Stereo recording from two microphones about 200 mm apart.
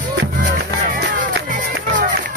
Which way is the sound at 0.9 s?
55° right (ahead or behind).